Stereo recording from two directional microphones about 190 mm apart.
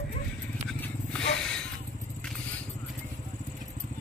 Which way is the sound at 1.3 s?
5° left (ahead or behind).